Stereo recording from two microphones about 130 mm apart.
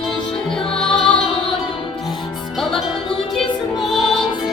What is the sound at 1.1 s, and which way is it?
Music, 40° left (ahead or behind).